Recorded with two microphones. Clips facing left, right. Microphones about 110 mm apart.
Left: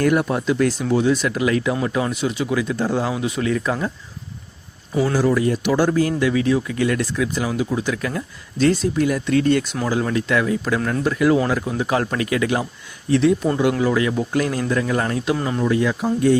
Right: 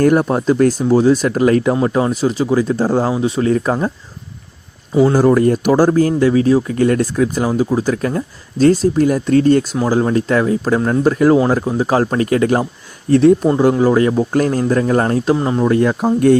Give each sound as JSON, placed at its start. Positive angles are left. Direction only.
{"t": 0.0, "sound": "speech", "side_deg": -40}
{"t": 5.1, "sound": "speech", "side_deg": -50}
{"t": 11.0, "sound": "speech", "side_deg": -40}
{"t": 15.6, "sound": "speech", "side_deg": -50}